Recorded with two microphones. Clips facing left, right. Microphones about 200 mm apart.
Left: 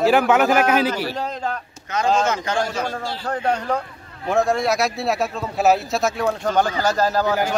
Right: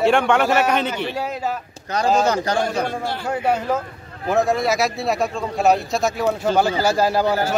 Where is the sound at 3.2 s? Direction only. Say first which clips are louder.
Right 1 dB; 10° right (ahead or behind).